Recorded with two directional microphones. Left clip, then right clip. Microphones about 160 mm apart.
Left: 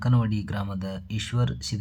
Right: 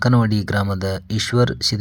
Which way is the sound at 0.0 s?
40° right (ahead or behind).